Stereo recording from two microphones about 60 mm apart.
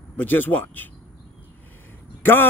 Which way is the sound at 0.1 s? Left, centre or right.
Left.